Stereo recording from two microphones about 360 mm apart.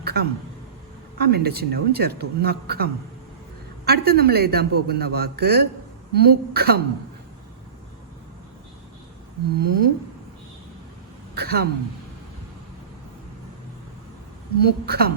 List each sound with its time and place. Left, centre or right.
0.0 s a sound: right
1.2 s a man's voice: right
3.8 s a man's voice: right
9.6 s a man's voice: right
11.3 s a woman's voice: right
14.6 s a man's voice: right